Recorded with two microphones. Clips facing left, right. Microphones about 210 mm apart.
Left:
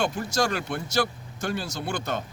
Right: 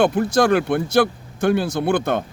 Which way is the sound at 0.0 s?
55° right (ahead or behind).